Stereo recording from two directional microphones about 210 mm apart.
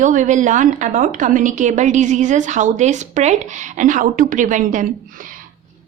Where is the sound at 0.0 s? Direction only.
35° right (ahead or behind).